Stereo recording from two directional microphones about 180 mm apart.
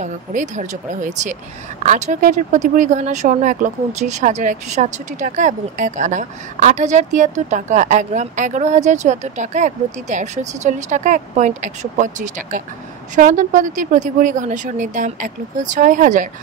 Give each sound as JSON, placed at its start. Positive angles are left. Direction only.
{"t": 0.0, "sound": "speech", "side_deg": -45}